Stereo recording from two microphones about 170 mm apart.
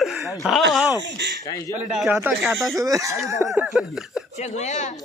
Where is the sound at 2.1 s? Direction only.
10° right (ahead or behind).